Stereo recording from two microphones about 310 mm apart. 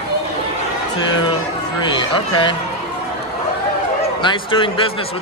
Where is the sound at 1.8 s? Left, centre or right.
Centre.